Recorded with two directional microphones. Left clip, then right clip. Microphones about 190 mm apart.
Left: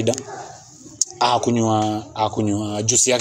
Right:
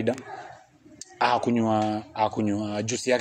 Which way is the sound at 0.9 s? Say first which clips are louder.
Left 5 dB; 35° right (ahead or behind).